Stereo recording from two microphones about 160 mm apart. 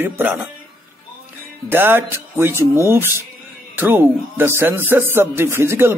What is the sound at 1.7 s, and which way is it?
Speech, 15° right (ahead or behind).